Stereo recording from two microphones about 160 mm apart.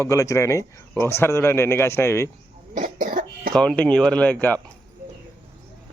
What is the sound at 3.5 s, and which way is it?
Speech, 5° left (ahead or behind).